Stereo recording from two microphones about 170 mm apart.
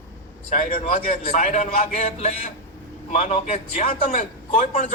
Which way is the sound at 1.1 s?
40° left (ahead or behind).